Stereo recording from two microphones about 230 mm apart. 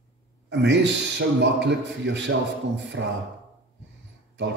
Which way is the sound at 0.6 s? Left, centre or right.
Right.